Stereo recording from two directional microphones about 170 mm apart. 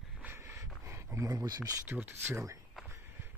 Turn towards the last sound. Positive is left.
turn(degrees=-15)  # may be behind; listen again after turning